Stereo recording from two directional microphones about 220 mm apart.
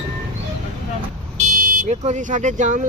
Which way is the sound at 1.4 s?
40° right (ahead or behind).